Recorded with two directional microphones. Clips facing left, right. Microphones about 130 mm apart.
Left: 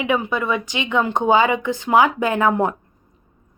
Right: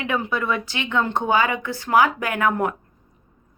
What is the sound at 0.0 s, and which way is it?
A woman's voice, 15° left (ahead or behind).